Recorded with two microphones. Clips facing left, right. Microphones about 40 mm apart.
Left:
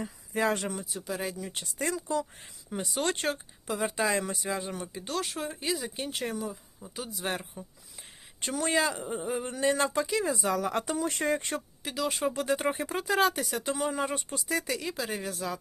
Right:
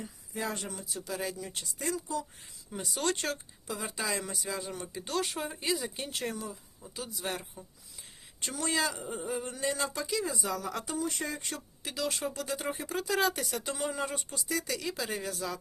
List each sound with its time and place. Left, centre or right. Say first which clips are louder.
0.0 s speech: left 8 dB; left
0.8 s speech: left 2 dB; centre
1.6 s speech: left 3 dB; left
2.0 s speech: left 5 dB; left
2.6 s speech: left 2 dB; left
4.9 s speech: right 1 dB; centre; by 11.6 s left
11.8 s speech: left 1 dB; centre
12.2 s speech: left 6 dB; left
12.5 s speech: left 7 dB; left
12.9 s speech: left 2 dB; left
13.4 s speech: left 4 dB; centre
14.3 s speech: left 3 dB; left
14.9 s a woman's voice: left 2 dB; centre